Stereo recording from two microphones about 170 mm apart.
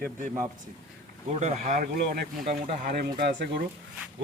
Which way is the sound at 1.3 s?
45° right (ahead or behind).